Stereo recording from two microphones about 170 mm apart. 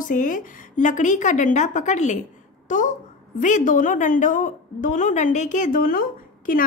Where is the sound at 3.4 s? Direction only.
50° left (ahead or behind).